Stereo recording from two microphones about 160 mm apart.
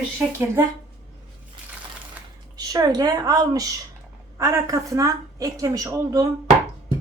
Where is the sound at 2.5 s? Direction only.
25° right (ahead or behind).